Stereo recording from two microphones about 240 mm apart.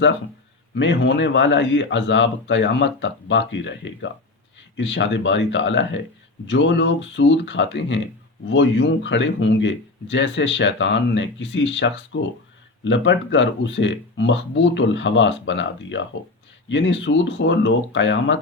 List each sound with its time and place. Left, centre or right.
0.7 s speech: left